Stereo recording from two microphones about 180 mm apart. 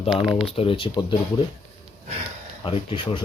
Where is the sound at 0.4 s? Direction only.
30° left (ahead or behind).